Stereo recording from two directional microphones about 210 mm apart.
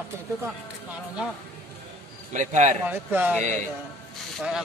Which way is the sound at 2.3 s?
35° right (ahead or behind).